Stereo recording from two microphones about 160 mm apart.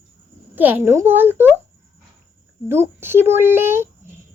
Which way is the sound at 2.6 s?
15° right (ahead or behind).